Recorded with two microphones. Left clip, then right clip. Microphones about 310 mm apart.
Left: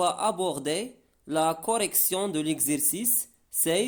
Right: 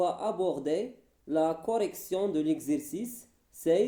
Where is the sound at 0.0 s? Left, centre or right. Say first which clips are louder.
Left 3 dB; left.